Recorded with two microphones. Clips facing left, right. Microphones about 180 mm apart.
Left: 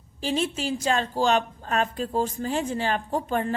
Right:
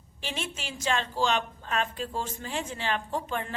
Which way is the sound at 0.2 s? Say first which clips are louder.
Left 10 dB; 35° left (ahead or behind).